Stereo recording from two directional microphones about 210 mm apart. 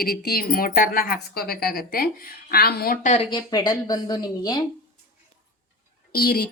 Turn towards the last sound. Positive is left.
turn(degrees=45)  # may be behind; listen again after turning